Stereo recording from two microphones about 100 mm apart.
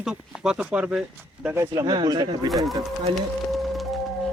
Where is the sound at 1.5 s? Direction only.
25° right (ahead or behind).